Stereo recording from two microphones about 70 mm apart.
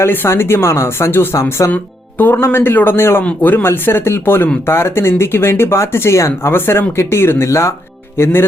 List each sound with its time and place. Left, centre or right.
0.0 s speech: left
1.7 s speech: left